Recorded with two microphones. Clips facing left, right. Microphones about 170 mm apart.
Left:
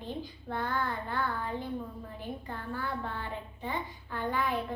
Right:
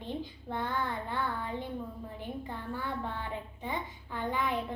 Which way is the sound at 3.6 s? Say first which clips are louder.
Left 3 dB; 15° right (ahead or behind).